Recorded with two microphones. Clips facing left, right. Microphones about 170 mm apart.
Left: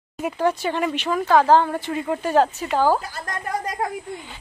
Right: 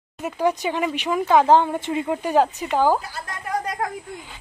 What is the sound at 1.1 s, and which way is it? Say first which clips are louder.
Speech: even; 15° right (ahead or behind).